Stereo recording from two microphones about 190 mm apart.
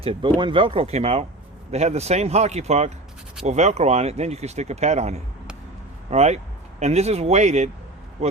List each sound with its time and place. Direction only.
0.0 s speech: 30° right (ahead or behind)